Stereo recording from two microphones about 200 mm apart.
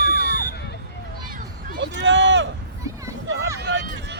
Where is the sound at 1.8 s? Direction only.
65° right (ahead or behind).